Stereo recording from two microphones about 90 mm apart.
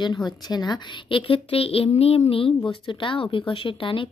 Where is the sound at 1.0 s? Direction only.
80° left.